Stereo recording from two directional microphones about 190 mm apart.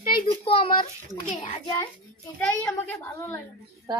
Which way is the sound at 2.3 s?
10° left (ahead or behind).